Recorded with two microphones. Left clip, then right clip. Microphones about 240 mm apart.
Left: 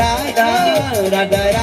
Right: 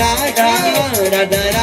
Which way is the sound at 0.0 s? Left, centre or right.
Right.